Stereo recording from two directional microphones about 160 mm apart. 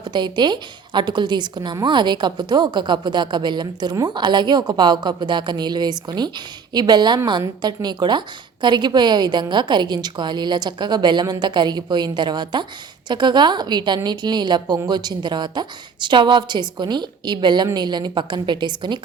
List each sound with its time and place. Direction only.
0.0 s a woman's voice: 25° right (ahead or behind)